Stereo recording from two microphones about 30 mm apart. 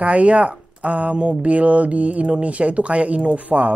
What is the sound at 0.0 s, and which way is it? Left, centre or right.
Speech, right.